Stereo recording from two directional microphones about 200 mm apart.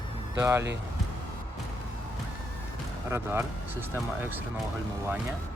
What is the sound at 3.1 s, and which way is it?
Speech, 10° right (ahead or behind).